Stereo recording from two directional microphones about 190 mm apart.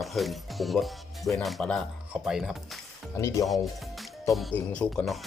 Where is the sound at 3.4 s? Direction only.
Centre (ahead or behind).